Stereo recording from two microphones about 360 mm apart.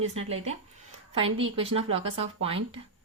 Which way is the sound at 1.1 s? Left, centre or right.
Centre.